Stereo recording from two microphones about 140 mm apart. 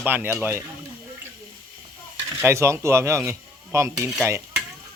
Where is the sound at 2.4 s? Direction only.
20° right (ahead or behind).